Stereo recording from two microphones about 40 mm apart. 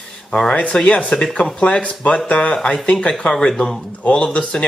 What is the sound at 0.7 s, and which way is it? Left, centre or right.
Speech, left.